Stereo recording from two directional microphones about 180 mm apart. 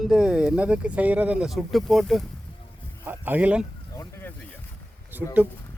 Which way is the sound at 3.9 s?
15° left (ahead or behind).